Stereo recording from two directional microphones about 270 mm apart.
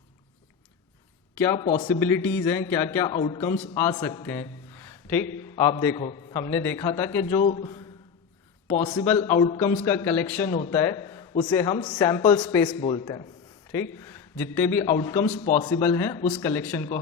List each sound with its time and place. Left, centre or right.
1.4 s a man's voice: centre
15.7 s a man's voice: centre